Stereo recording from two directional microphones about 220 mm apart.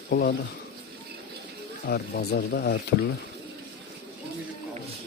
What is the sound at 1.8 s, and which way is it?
Speech, 45° left (ahead or behind).